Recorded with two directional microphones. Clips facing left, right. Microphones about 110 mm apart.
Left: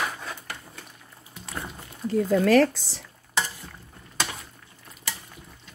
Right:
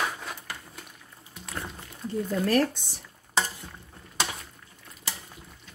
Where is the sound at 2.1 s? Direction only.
90° left.